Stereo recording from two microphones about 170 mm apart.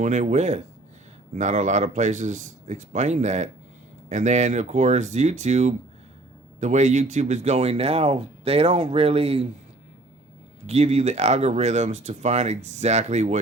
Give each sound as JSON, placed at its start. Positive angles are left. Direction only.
{"t": 0.0, "sound": "speech", "side_deg": -45}
{"t": 10.7, "sound": "speech", "side_deg": -40}